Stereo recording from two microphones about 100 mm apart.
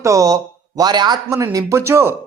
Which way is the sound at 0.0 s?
35° right (ahead or behind).